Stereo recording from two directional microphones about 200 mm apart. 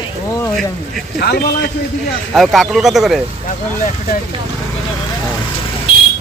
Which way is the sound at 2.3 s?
Centre (ahead or behind).